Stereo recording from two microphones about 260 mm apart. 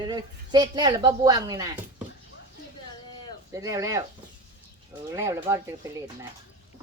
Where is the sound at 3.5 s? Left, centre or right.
Centre.